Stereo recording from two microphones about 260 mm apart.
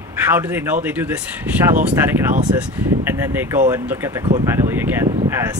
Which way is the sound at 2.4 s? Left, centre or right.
Centre.